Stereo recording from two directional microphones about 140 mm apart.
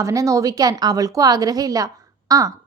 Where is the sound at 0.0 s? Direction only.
25° right (ahead or behind).